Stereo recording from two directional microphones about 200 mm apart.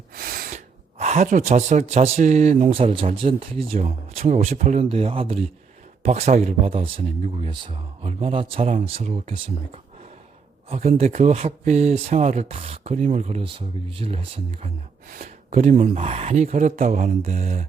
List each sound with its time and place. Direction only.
0.2 s sneeze: 45° right (ahead or behind)
0.5 s speech: 35° right (ahead or behind)